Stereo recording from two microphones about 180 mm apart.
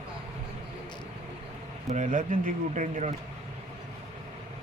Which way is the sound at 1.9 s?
45° right (ahead or behind).